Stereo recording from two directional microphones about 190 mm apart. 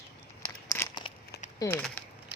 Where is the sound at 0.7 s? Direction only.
15° left (ahead or behind).